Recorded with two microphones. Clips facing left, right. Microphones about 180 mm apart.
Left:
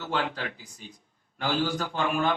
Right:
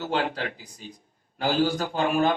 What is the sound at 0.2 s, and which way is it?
Speech, 40° right (ahead or behind).